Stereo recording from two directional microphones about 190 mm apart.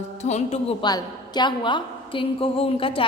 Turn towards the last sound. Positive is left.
turn(degrees=30)  # may be behind; listen again after turning